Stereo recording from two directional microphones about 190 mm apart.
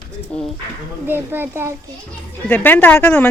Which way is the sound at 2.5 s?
10° left (ahead or behind).